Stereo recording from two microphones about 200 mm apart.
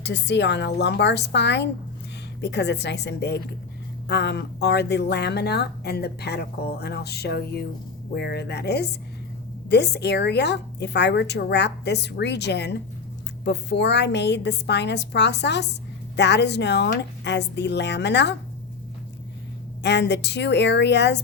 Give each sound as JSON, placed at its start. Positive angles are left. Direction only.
{"t": 0.0, "sound": "speech", "side_deg": 60}
{"t": 19.8, "sound": "speech", "side_deg": 60}